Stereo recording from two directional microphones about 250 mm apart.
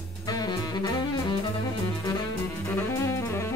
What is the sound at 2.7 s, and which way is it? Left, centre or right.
Music, centre.